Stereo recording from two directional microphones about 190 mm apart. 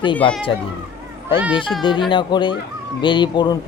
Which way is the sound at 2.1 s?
25° left (ahead or behind).